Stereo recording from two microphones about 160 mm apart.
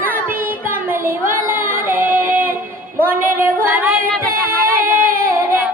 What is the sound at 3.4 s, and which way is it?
Music, 10° right (ahead or behind).